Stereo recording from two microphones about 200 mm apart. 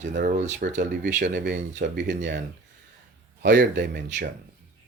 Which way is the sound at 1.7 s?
65° right (ahead or behind).